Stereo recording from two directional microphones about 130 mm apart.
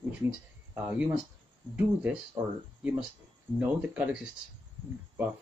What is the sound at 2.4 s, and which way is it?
Speech, 15° right (ahead or behind).